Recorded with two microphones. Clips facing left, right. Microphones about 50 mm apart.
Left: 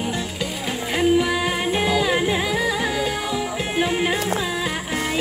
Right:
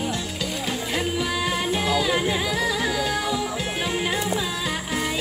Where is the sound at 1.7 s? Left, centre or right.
Centre.